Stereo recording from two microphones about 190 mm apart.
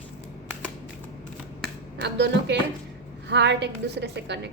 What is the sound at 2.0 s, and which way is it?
A woman's voice, 65° right (ahead or behind).